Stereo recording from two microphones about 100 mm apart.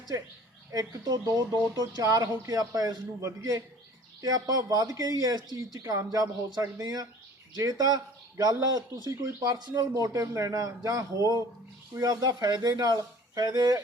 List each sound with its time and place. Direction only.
0.7 s speech: 35° right (ahead or behind)